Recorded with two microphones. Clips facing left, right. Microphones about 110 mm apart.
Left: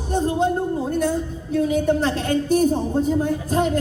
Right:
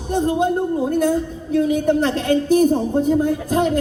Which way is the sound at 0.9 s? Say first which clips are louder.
Right 4 dB; 50° right (ahead or behind).